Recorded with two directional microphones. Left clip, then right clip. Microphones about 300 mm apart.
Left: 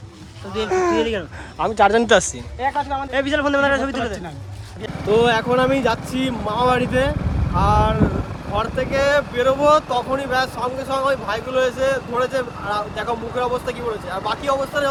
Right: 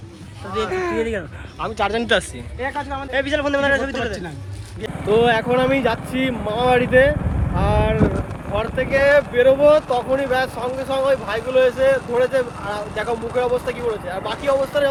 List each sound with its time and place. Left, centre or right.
0.7 s speech: centre
1.6 s a man's voice: left
5.0 s speech: centre
7.5 s boat: centre
8.8 s speech: centre